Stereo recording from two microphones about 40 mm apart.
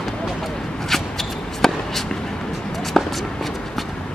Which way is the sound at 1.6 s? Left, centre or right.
Centre.